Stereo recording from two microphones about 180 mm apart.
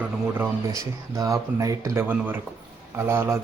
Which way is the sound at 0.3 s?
20° right (ahead or behind).